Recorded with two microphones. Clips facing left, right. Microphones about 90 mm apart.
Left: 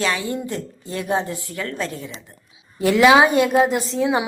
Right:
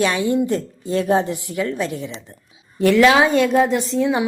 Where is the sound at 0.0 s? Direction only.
25° right (ahead or behind).